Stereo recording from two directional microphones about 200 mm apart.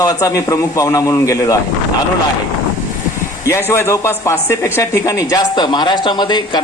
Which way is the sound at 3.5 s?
15° left (ahead or behind).